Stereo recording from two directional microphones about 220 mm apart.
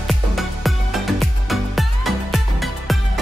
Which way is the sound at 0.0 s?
Centre (ahead or behind).